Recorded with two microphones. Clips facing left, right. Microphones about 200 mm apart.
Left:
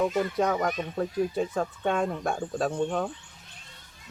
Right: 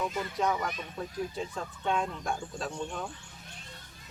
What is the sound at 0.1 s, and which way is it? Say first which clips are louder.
Speech: left 5 dB; 50° left (ahead or behind).